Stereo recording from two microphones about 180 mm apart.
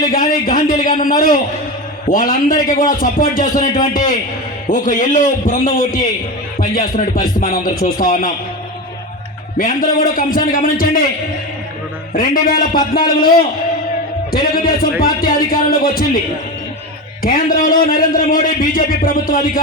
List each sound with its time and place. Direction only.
0.0 s a man's voice: 50° left (ahead or behind)
9.6 s a man's voice: 50° left (ahead or behind)
12.1 s a man's voice: 50° left (ahead or behind)
17.2 s a man's voice: 50° left (ahead or behind)